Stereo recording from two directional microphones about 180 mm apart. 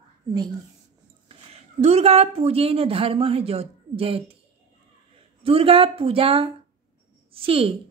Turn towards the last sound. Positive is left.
turn(degrees=-30)  # may be behind; listen again after turning